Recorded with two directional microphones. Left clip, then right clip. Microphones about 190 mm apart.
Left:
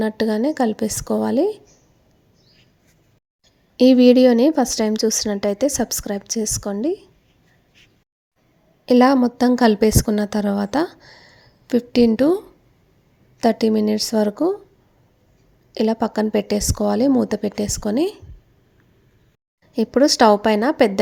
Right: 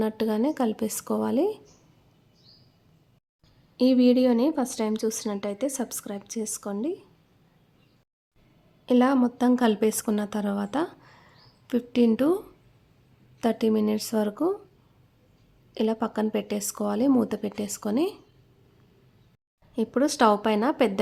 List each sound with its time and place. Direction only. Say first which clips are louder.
0.0 s a woman's voice: left 6 dB; 20° left (ahead or behind)
3.8 s a woman's voice: left 9 dB; 30° left (ahead or behind)
8.9 s a woman's voice: left 8 dB; 25° left (ahead or behind)
13.4 s a woman's voice: left 7 dB; 20° left (ahead or behind)
15.7 s a woman's voice: left 7 dB; 20° left (ahead or behind)
19.7 s a woman's voice: left 9 dB; 25° left (ahead or behind)